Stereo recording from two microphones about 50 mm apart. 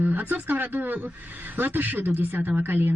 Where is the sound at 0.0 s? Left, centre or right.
Right.